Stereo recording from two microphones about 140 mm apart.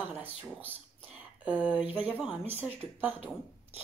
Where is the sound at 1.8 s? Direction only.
10° right (ahead or behind).